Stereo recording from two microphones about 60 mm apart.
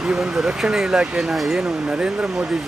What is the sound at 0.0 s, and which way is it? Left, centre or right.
Speech, centre.